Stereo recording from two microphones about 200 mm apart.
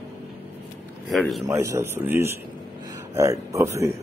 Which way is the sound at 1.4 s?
15° right (ahead or behind).